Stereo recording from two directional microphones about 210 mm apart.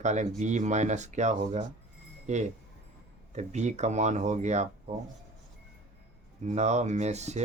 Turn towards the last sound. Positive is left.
turn(degrees=-30)  # may be behind; listen again after turning